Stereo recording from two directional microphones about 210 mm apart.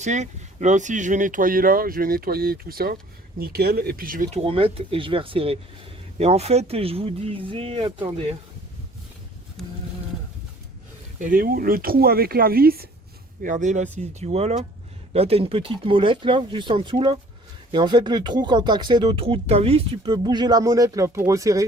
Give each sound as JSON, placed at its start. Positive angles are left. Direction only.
{"t": 0.0, "sound": "speech", "side_deg": -35}
{"t": 11.2, "sound": "speech", "side_deg": -40}